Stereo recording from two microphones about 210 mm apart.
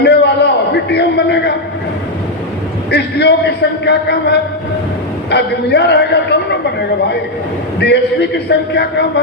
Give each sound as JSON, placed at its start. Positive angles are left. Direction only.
{"t": 0.0, "sound": "a sound", "side_deg": 50}
{"t": 2.9, "sound": "a man's voice", "side_deg": 55}
{"t": 7.8, "sound": "a man's voice", "side_deg": 55}